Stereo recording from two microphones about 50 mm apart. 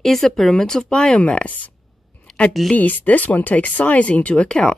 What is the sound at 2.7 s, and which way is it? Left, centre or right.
Speech, left.